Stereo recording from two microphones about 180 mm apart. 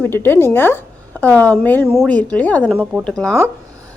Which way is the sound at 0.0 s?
10° left (ahead or behind).